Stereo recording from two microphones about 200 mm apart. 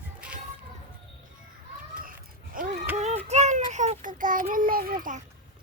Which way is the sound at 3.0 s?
35° right (ahead or behind).